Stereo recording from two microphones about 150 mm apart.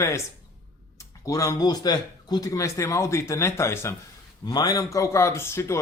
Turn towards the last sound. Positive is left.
turn(degrees=20)  # may be behind; listen again after turning